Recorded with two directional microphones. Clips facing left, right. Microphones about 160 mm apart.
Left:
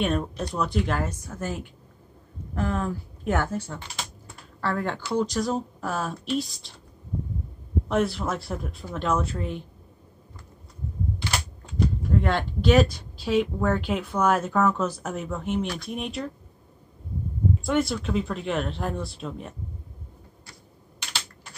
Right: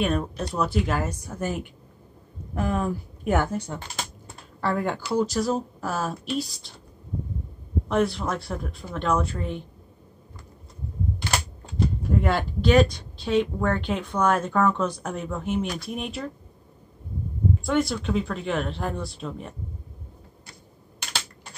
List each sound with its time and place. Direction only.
0.0 s a woman's voice: centre (ahead or behind)
7.9 s a woman's voice: centre (ahead or behind)
11.1 s a sound: 45° right (ahead or behind)
12.2 s a woman's voice: 5° right (ahead or behind)
17.6 s a woman's voice: centre (ahead or behind)